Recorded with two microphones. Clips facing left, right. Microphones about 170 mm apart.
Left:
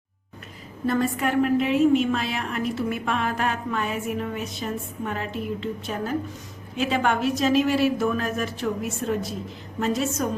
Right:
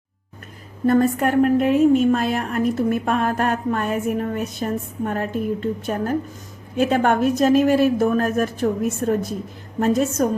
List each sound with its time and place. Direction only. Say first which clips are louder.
0.9 s a woman's voice: right 6 dB; 50° right (ahead or behind)